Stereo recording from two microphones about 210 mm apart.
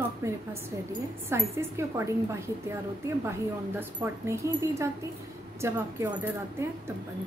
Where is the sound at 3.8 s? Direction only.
15° right (ahead or behind).